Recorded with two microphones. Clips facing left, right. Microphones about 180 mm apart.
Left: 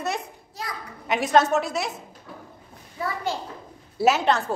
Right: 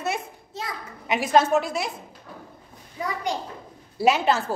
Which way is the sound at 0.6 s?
25° right (ahead or behind).